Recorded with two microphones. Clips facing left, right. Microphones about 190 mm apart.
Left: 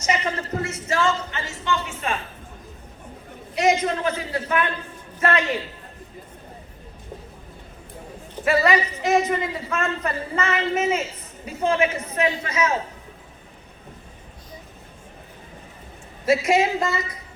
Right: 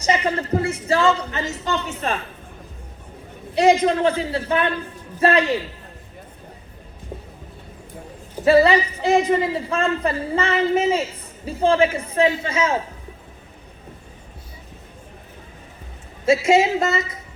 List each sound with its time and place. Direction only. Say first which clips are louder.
0.6 s a man's voice: right 3 dB; 30° right (ahead or behind)
3.5 s a man's voice: right 5 dB; 30° right (ahead or behind)
8.4 s a man's voice: right 5 dB; 30° right (ahead or behind)
16.2 s a man's voice: right 3 dB; 25° right (ahead or behind)